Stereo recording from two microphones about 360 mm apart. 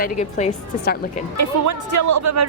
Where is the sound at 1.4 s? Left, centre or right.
Right.